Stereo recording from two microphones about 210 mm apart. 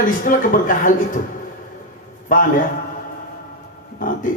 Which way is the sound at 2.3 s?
40° left (ahead or behind).